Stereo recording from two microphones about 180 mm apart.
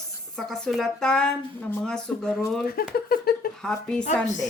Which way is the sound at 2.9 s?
55° left (ahead or behind).